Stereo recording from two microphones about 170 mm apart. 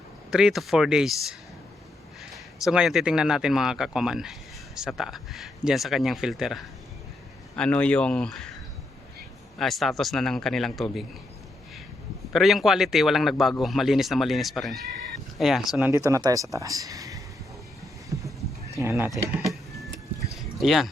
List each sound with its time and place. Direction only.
0.3 s speech: 5° right (ahead or behind)
9.6 s speech: centre (ahead or behind)
12.3 s speech: centre (ahead or behind)
15.9 s speech: 20° right (ahead or behind)
18.1 s horse: 20° right (ahead or behind)
18.7 s speech: 15° right (ahead or behind)
19.4 s vehicle: centre (ahead or behind)
20.3 s a sound: centre (ahead or behind)